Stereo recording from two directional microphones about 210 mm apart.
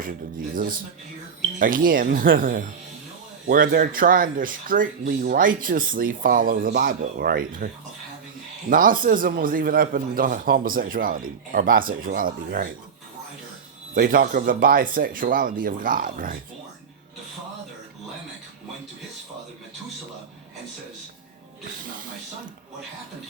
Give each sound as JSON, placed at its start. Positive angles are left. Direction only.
{"t": 0.5, "sound": "speech", "side_deg": -40}
{"t": 8.7, "sound": "speech", "side_deg": -40}
{"t": 13.9, "sound": "speech", "side_deg": -40}